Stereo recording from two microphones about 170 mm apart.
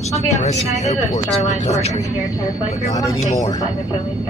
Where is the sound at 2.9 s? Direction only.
20° left (ahead or behind).